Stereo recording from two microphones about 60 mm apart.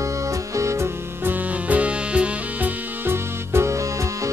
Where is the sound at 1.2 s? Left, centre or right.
Right.